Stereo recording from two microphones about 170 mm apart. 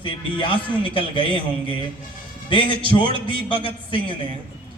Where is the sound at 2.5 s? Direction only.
30° left (ahead or behind).